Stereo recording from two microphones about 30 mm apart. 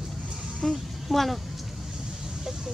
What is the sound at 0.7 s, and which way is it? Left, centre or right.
Speech, centre.